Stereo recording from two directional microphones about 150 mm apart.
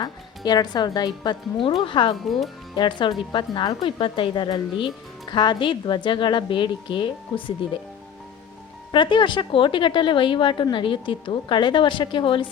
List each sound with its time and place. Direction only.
0.0 s speech: 30° left (ahead or behind)
2.1 s speech: centre (ahead or behind)
2.7 s speech: 30° left (ahead or behind)
8.9 s speech: 30° left (ahead or behind)